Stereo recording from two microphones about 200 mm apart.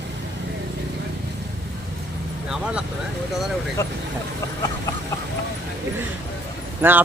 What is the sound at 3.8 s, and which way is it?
Speech, 15° left (ahead or behind).